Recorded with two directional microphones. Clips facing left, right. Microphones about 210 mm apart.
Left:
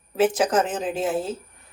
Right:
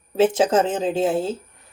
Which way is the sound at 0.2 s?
25° right (ahead or behind).